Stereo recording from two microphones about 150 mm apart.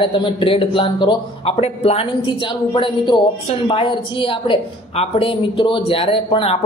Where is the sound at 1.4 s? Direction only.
45° left (ahead or behind).